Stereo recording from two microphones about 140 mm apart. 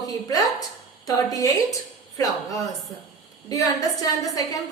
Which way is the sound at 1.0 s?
25° left (ahead or behind).